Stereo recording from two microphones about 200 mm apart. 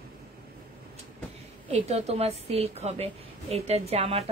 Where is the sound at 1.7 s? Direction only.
30° right (ahead or behind).